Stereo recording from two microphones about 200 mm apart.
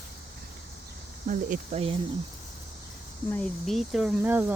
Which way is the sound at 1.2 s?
35° right (ahead or behind).